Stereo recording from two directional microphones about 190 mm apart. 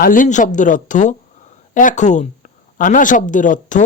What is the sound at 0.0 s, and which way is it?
Speech, 45° left (ahead or behind).